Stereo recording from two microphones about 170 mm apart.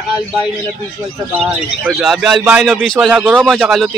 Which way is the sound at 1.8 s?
5° right (ahead or behind).